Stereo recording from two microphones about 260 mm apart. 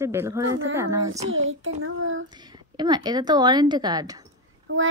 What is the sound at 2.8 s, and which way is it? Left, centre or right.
Speech, centre.